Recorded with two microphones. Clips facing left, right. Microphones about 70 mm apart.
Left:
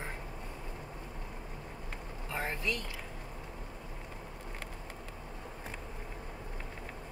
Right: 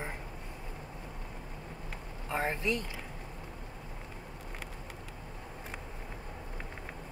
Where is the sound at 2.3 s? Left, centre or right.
Right.